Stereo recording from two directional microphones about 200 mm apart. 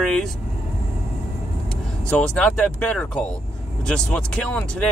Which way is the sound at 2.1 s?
5° left (ahead or behind).